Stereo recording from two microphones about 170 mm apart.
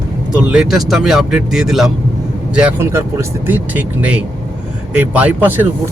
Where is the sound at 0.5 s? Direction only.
Centre (ahead or behind).